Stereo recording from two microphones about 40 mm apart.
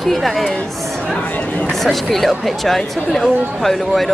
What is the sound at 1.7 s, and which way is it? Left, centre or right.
Speech, centre.